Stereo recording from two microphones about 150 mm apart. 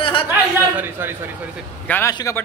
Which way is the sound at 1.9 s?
15° left (ahead or behind).